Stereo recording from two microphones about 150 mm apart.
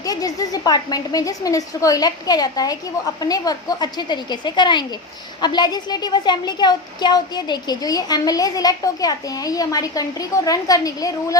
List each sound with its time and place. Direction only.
0.0 s a woman's voice: 25° left (ahead or behind)